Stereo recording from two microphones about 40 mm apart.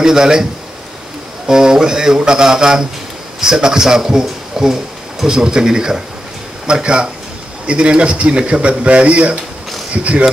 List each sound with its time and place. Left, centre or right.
0.0 s speech: centre
1.5 s a man's voice: centre; by 9.4 s right